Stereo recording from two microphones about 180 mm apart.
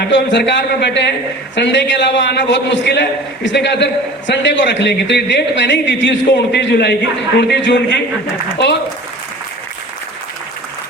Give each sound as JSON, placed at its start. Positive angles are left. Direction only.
{"t": 0.0, "sound": "a man's voice", "side_deg": 85}
{"t": 4.3, "sound": "a man's voice", "side_deg": 85}